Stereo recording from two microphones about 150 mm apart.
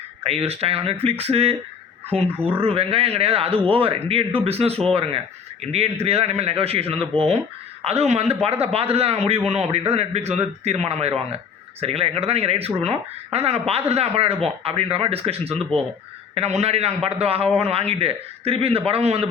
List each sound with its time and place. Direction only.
0.2 s a man's voice: 40° right (ahead or behind)